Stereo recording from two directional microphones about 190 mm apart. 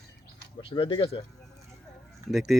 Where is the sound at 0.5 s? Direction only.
25° left (ahead or behind).